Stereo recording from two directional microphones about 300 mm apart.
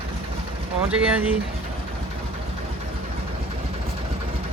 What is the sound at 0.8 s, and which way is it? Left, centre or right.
Speech, centre.